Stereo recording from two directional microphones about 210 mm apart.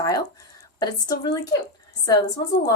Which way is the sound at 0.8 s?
20° left (ahead or behind).